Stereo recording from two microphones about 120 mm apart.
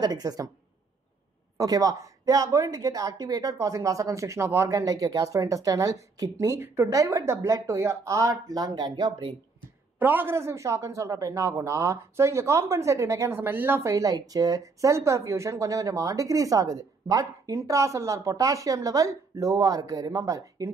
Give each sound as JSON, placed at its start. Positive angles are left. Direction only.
{"t": 0.0, "sound": "a woman's voice", "side_deg": -35}
{"t": 1.6, "sound": "speech", "side_deg": -30}
{"t": 9.9, "sound": "speech", "side_deg": -15}